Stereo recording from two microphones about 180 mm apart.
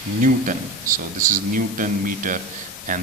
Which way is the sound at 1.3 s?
50° right (ahead or behind).